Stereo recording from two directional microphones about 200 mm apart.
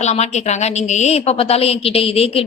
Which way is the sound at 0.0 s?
35° left (ahead or behind).